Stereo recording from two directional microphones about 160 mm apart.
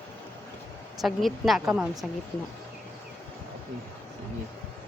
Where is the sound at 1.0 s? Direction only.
Centre (ahead or behind).